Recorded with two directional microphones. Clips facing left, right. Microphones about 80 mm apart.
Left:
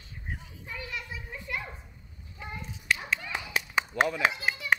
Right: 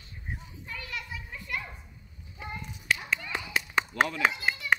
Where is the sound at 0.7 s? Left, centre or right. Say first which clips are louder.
Left 1 dB; centre.